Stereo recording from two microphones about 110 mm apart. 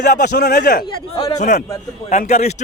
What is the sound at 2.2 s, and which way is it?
Speech, 90° left.